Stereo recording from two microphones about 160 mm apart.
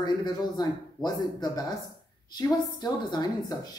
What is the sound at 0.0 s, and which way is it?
Speech, 25° left (ahead or behind).